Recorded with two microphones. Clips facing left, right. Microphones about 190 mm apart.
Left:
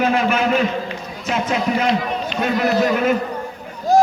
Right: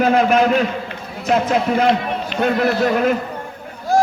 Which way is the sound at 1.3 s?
55° right (ahead or behind).